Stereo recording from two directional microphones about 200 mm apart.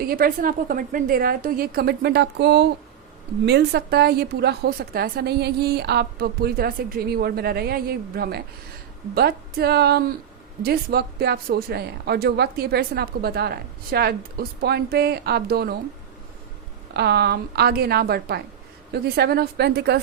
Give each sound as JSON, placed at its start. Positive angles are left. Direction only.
{"t": 0.0, "sound": "speech", "side_deg": -45}
{"t": 16.9, "sound": "a woman's voice", "side_deg": -55}